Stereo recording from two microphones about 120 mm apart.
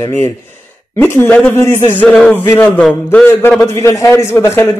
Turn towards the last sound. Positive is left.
turn(degrees=20)  # may be behind; listen again after turning